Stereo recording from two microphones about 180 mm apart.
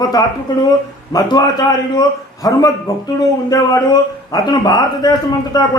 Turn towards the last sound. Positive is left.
turn(degrees=20)  # may be behind; listen again after turning